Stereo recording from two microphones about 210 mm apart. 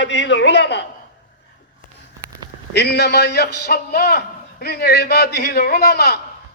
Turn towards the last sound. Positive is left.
turn(degrees=50)  # may be behind; listen again after turning